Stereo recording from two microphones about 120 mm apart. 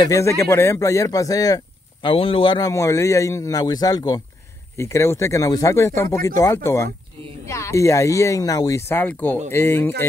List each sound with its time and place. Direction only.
0.0 s speech: 25° left (ahead or behind)
2.0 s speech: 50° left (ahead or behind)
2.6 s speech: 25° left (ahead or behind)
4.7 s speech: 20° left (ahead or behind)